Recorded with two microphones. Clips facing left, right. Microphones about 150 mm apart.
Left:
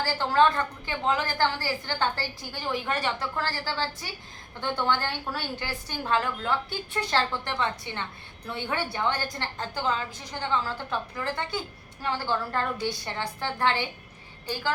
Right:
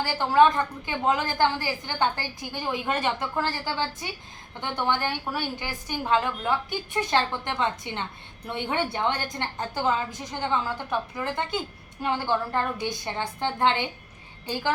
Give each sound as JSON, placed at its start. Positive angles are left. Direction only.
{"t": 0.0, "sound": "a woman's voice", "side_deg": -15}